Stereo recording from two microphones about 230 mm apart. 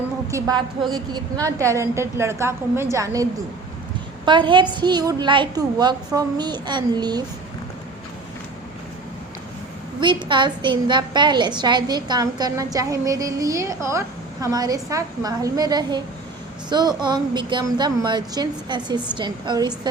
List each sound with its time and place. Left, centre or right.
0.3 s a woman's voice: centre
4.3 s a woman's voice: right
10.0 s a woman's voice: right